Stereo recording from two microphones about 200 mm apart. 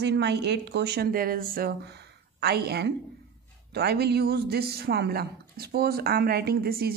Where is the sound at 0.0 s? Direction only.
55° right (ahead or behind).